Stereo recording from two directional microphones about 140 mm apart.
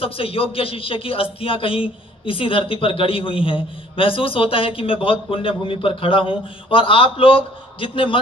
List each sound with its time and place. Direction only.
0.0 s a man's voice: 40° left (ahead or behind)